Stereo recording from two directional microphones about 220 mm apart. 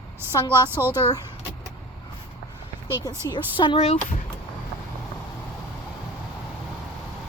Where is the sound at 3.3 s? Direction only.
20° left (ahead or behind).